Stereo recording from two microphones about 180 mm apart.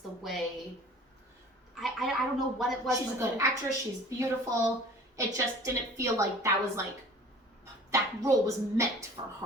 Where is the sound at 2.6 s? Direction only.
Centre (ahead or behind).